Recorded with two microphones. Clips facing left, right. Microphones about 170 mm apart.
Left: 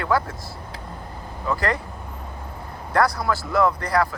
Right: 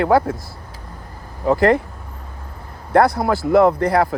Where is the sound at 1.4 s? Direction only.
55° right (ahead or behind).